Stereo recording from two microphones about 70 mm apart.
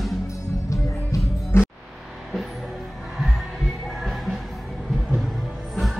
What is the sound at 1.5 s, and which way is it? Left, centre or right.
Music, left.